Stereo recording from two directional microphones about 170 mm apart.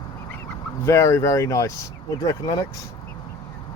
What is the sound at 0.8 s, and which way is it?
Speech, 20° left (ahead or behind).